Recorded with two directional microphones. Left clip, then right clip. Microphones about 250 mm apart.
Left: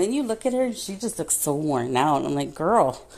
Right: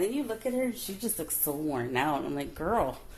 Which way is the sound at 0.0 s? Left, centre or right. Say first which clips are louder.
Left 7 dB; left.